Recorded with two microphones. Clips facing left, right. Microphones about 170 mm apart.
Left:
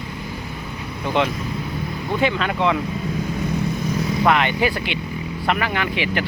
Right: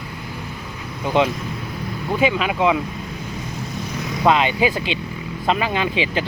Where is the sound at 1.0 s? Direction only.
15° right (ahead or behind).